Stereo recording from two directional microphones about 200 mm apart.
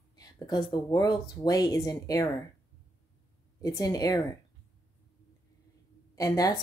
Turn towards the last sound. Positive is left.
turn(degrees=15)  # may be behind; listen again after turning